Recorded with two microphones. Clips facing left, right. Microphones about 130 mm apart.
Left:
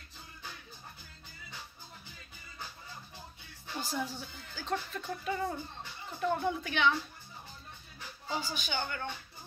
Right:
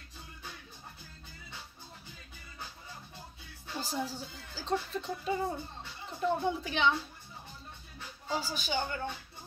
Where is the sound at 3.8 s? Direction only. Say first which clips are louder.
Right 1 dB; 30° right (ahead or behind).